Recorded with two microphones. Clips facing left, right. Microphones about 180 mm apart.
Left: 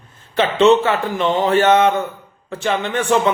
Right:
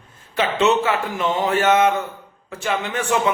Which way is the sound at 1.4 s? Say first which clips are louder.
Left 3 dB; 10° right (ahead or behind).